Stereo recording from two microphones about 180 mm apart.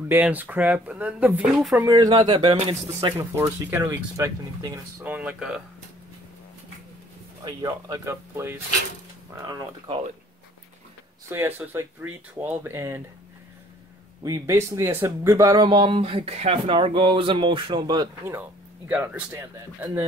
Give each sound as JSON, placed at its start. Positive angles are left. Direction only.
{"t": 0.1, "sound": "speech", "side_deg": -10}
{"t": 1.8, "sound": "speech", "side_deg": -20}
{"t": 5.0, "sound": "speech", "side_deg": -5}
{"t": 7.4, "sound": "speech", "side_deg": -20}
{"t": 11.2, "sound": "speech", "side_deg": -10}
{"t": 14.2, "sound": "speech", "side_deg": -20}